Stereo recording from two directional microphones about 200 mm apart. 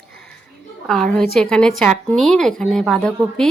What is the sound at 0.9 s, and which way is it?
A woman's voice, centre (ahead or behind).